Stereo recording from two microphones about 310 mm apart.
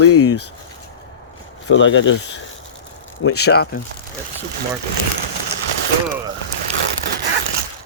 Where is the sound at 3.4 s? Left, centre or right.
Left.